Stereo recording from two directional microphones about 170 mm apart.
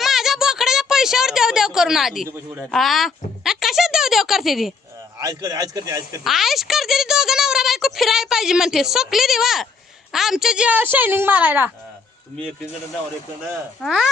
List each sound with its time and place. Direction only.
0.0 s a sound: centre (ahead or behind)
2.7 s speech: centre (ahead or behind)
5.2 s speech: 20° right (ahead or behind)
6.2 s speech: centre (ahead or behind)
13.8 s speech: 5° right (ahead or behind)